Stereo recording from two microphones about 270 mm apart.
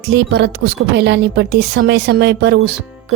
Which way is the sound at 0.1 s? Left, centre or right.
Right.